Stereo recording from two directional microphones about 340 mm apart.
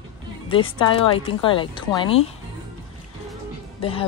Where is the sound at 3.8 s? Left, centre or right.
Centre.